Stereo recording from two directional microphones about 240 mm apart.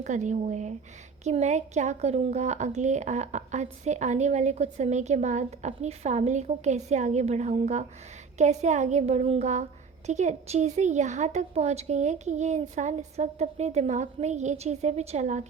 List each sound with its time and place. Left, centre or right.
0.0 s a woman's voice: right